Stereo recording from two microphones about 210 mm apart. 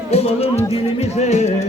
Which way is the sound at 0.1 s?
30° left (ahead or behind).